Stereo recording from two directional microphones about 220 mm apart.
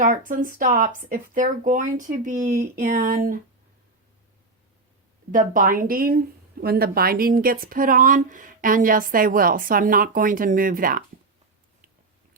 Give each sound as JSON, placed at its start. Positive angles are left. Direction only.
{"t": 0.0, "sound": "speech", "side_deg": -35}
{"t": 5.3, "sound": "speech", "side_deg": -40}